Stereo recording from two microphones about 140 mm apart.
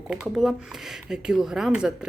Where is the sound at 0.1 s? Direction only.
5° right (ahead or behind).